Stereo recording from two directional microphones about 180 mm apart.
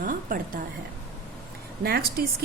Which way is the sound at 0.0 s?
50° right (ahead or behind).